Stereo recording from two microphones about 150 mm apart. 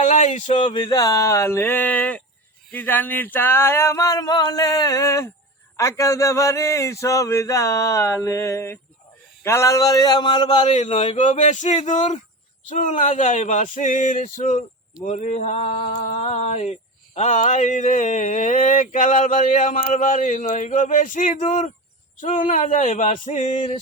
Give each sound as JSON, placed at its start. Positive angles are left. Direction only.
{"t": 0.0, "sound": "speech", "side_deg": 55}
{"t": 0.7, "sound": "speech", "side_deg": 30}
{"t": 10.6, "sound": "speech", "side_deg": 50}